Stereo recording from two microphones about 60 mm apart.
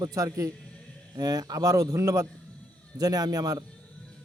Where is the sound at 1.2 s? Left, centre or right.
Right.